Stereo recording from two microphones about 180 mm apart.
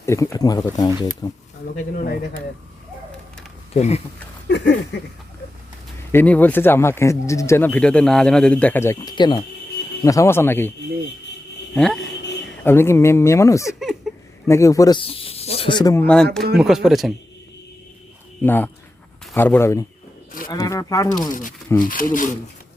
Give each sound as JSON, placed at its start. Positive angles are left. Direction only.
{"t": 0.0, "sound": "speech", "side_deg": 15}
{"t": 1.7, "sound": "speech", "side_deg": 45}
{"t": 3.8, "sound": "speech", "side_deg": 40}
{"t": 4.4, "sound": "a sound", "side_deg": 70}
{"t": 6.1, "sound": "speech", "side_deg": 10}
{"t": 11.7, "sound": "speech", "side_deg": 5}
{"t": 12.0, "sound": "a sound", "side_deg": 70}
{"t": 12.6, "sound": "speech", "side_deg": 15}
{"t": 13.7, "sound": "a sound", "side_deg": 0}
{"t": 14.4, "sound": "speech", "side_deg": 15}
{"t": 16.6, "sound": "speech", "side_deg": 0}
{"t": 18.4, "sound": "speech", "side_deg": 10}
{"t": 21.8, "sound": "speech", "side_deg": 50}